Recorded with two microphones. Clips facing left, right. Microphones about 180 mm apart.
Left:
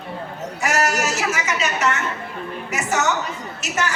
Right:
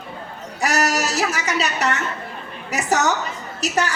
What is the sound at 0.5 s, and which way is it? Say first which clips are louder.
A woman's voice: right 1 dB; 35° right (ahead or behind).